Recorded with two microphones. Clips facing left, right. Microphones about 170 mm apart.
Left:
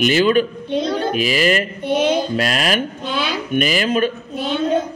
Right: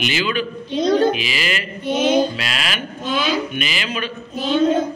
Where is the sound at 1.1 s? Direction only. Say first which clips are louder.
Left 7 dB; 45° left (ahead or behind).